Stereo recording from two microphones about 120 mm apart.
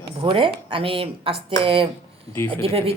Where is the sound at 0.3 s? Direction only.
45° right (ahead or behind).